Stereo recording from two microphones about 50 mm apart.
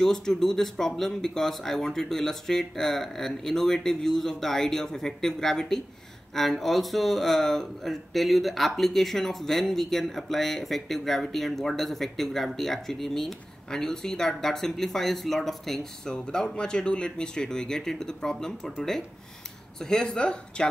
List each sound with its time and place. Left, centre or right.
0.0 s speech: centre